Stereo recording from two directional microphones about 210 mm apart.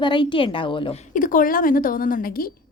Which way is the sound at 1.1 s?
40° left (ahead or behind).